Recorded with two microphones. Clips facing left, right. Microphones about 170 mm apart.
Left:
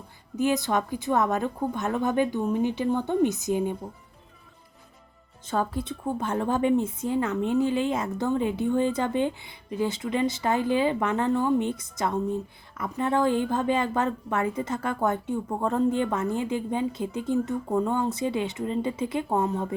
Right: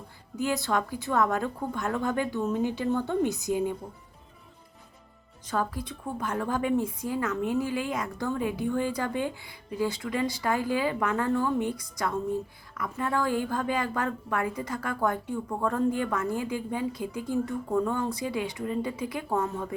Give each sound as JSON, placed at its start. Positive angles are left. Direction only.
{"t": 0.3, "sound": "speech", "side_deg": 20}
{"t": 5.5, "sound": "speech", "side_deg": 25}